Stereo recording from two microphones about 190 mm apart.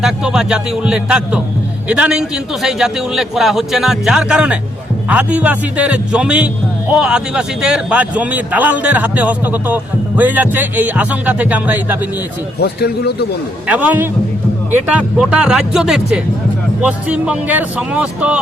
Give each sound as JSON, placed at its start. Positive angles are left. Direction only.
{"t": 0.0, "sound": "a man's voice", "side_deg": -5}
{"t": 12.5, "sound": "a man's voice", "side_deg": 55}
{"t": 13.7, "sound": "a man's voice", "side_deg": -5}